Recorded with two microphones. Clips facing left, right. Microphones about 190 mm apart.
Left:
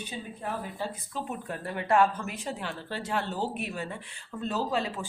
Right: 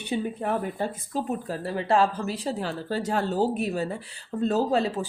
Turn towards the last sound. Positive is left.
turn(degrees=-40)  # may be behind; listen again after turning